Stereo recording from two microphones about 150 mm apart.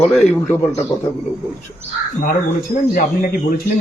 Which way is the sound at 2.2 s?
75° left (ahead or behind).